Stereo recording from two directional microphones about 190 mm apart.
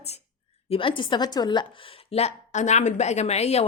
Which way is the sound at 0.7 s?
25° left (ahead or behind).